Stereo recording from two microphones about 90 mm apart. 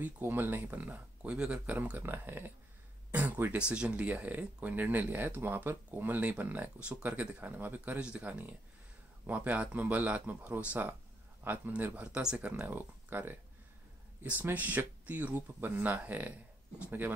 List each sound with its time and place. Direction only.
0.0 s speech: 20° right (ahead or behind)
14.4 s speech: 15° right (ahead or behind)